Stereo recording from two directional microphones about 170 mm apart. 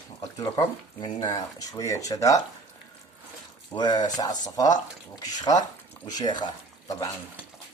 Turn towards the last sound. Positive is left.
turn(degrees=25)  # may be behind; listen again after turning